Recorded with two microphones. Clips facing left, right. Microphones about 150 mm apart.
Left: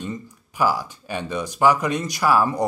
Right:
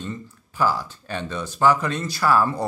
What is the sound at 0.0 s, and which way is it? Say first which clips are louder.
Speech: left 2 dB; 15° left (ahead or behind).